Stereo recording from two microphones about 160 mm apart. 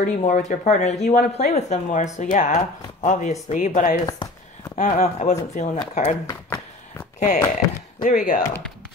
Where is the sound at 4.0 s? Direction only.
25° left (ahead or behind).